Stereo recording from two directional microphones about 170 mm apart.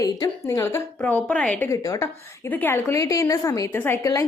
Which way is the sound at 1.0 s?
5° left (ahead or behind).